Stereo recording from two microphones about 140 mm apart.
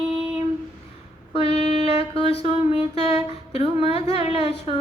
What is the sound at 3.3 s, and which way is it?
Speech, 45° left (ahead or behind).